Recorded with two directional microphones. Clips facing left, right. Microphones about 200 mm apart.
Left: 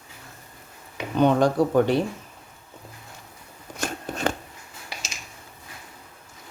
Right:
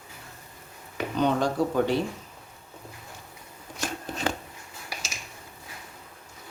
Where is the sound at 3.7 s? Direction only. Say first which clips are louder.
Left 3 dB; 50° left (ahead or behind).